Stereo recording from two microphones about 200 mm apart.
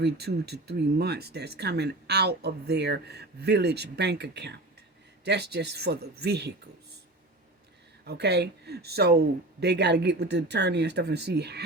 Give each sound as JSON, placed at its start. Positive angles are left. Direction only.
{"t": 0.0, "sound": "speech", "side_deg": -55}
{"t": 8.0, "sound": "speech", "side_deg": -55}